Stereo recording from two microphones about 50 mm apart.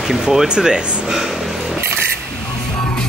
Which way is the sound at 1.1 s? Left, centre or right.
Centre.